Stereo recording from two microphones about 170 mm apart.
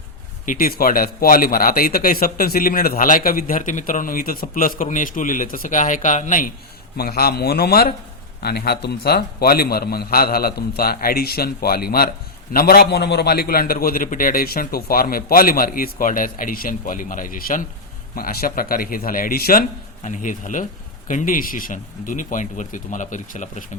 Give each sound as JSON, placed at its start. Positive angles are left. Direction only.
{"t": 0.4, "sound": "a man's voice", "side_deg": 55}
{"t": 6.9, "sound": "a man's voice", "side_deg": 65}
{"t": 20.0, "sound": "speech", "side_deg": 45}